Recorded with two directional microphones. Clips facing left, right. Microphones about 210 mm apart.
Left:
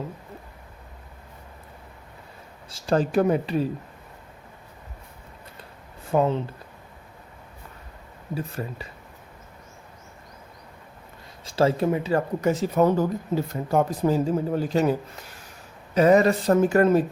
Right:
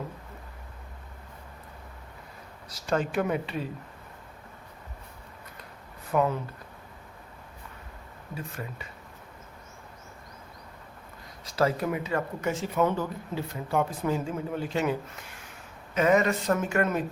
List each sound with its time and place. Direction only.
2.6 s speech: 30° left (ahead or behind)
6.1 s speech: 25° left (ahead or behind)
8.4 s speech: 35° left (ahead or behind)
11.4 s speech: 30° left (ahead or behind)